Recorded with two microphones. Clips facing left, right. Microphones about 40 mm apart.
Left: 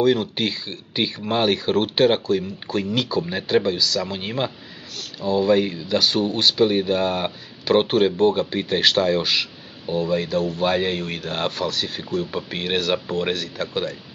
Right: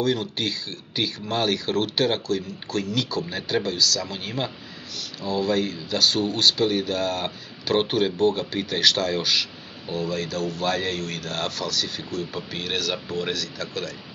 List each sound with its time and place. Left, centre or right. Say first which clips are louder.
0.0 s speech: left 5 dB; left